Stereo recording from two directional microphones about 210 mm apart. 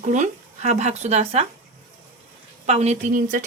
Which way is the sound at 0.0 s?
35° right (ahead or behind).